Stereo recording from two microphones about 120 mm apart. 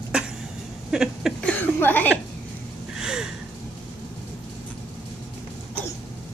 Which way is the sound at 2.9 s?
5° right (ahead or behind).